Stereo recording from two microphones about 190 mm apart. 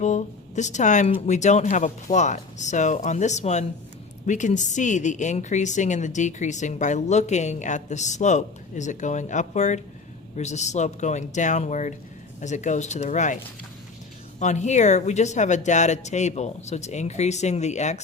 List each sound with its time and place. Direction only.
0.0 s a woman's voice: 40° left (ahead or behind)